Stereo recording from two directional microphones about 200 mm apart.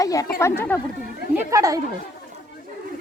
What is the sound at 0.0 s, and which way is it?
Speech, 15° left (ahead or behind).